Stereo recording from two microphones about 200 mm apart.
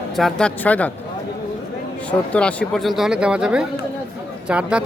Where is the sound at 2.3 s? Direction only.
5° left (ahead or behind).